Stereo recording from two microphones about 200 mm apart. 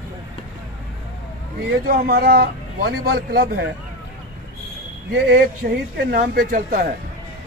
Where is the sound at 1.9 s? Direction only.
45° right (ahead or behind).